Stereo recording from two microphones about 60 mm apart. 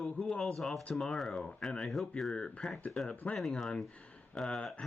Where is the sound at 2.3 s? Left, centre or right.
Centre.